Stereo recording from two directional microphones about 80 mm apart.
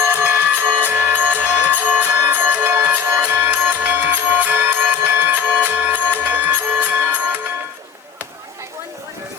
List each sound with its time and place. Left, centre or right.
0.2 s music: right